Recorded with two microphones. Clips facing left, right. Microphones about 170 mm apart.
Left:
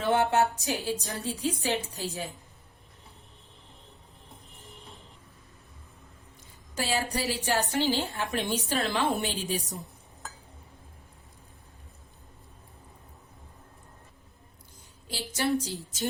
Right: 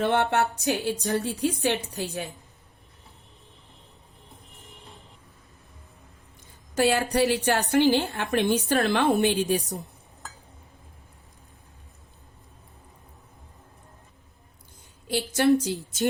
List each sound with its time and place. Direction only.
0.0 s a woman's voice: 65° right (ahead or behind)
6.7 s a woman's voice: 60° right (ahead or behind)
15.1 s a woman's voice: 60° right (ahead or behind)